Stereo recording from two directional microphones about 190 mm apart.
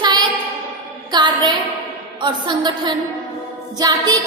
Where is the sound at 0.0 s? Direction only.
25° right (ahead or behind).